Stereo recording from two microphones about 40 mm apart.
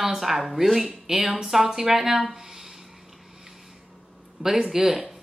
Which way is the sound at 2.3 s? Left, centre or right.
Centre.